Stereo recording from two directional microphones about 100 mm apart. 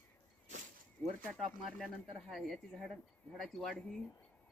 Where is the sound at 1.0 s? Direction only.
Centre (ahead or behind).